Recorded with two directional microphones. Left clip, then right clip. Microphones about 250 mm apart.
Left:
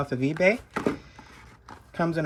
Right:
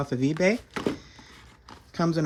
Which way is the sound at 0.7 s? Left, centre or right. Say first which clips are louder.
Left 2 dB; centre.